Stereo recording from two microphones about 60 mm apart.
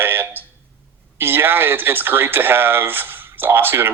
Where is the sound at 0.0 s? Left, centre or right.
Right.